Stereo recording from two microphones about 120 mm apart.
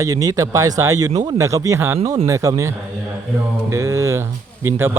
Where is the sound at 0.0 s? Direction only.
30° right (ahead or behind).